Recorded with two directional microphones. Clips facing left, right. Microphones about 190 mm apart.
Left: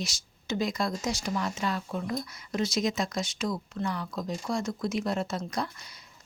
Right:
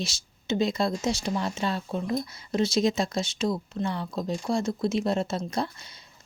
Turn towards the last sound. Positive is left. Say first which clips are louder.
# right 3 dB
turn(degrees=-25)  # may be behind; listen again after turning